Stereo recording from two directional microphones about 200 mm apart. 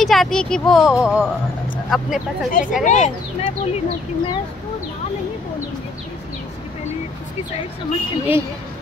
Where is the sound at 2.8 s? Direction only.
35° left (ahead or behind).